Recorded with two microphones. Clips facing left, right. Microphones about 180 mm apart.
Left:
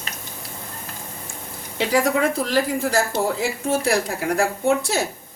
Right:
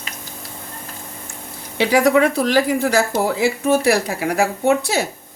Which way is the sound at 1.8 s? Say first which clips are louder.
Right 5 dB; 75° right (ahead or behind).